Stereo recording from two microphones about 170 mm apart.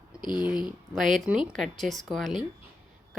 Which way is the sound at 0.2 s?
25° left (ahead or behind).